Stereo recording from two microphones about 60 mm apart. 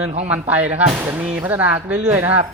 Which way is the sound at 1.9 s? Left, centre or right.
Centre.